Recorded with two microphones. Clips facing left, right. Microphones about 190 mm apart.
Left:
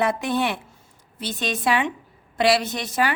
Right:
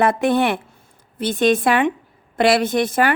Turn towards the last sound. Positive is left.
turn(degrees=-55)  # may be behind; listen again after turning